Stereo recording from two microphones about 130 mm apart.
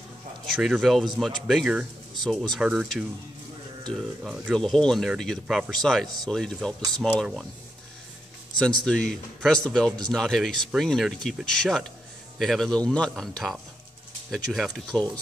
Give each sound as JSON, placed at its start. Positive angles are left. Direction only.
{"t": 0.6, "sound": "speech", "side_deg": 0}
{"t": 4.2, "sound": "speech", "side_deg": -5}
{"t": 8.5, "sound": "speech", "side_deg": 5}